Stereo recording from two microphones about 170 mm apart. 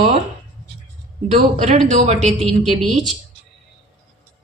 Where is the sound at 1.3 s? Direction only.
45° right (ahead or behind).